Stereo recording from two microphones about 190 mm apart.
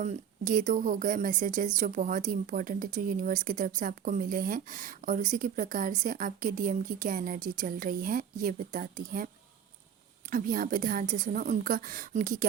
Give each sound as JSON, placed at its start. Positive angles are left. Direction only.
{"t": 0.0, "sound": "speech", "side_deg": -40}